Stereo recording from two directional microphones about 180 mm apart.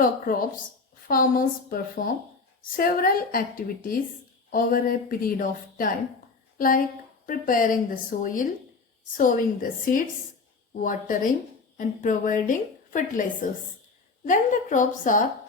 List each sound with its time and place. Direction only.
0.0 s a woman's voice: 50° left (ahead or behind)